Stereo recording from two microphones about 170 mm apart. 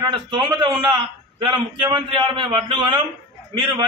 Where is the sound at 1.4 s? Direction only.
30° right (ahead or behind).